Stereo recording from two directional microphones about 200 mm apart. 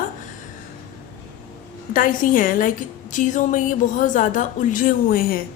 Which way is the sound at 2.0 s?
45° left (ahead or behind).